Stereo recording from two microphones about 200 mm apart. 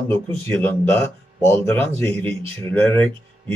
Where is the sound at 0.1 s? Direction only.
10° left (ahead or behind).